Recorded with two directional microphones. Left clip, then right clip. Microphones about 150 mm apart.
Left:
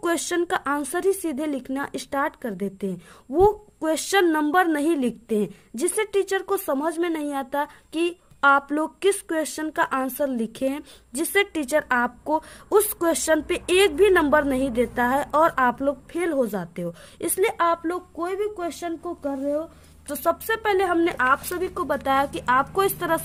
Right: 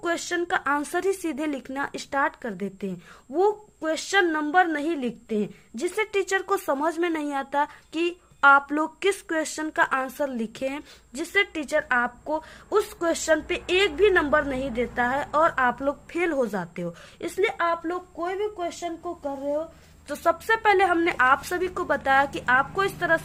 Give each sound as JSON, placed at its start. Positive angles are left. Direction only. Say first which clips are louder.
{"t": 0.0, "sound": "a woman's voice", "louder": "left 3 dB", "side_deg": 50}
{"t": 3.3, "sound": "a woman's voice", "louder": "left 4 dB", "side_deg": 50}
{"t": 11.1, "sound": "a woman's voice", "louder": "left 2 dB", "side_deg": 45}
{"t": 15.8, "sound": "speech", "louder": "left 1 dB", "side_deg": 30}
{"t": 17.2, "sound": "a woman's voice", "louder": "left 3 dB", "side_deg": 50}
{"t": 20.1, "sound": "speech", "louder": "right 1 dB", "side_deg": 25}